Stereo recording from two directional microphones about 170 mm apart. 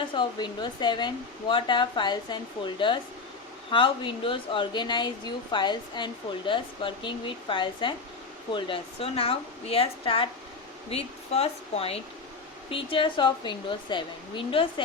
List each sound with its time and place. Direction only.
0.1 s a woman's voice: 25° left (ahead or behind)